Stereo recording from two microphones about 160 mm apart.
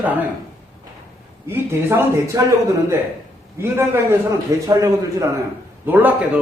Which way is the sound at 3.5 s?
15° right (ahead or behind).